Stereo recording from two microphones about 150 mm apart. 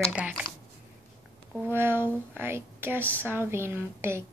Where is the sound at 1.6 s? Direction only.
15° right (ahead or behind).